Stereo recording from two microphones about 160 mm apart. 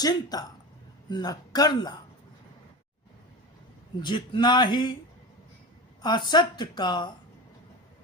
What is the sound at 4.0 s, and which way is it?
A woman's voice, 30° left (ahead or behind).